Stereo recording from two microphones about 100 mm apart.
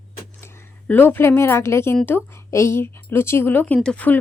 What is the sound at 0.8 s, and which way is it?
Speech, 15° left (ahead or behind).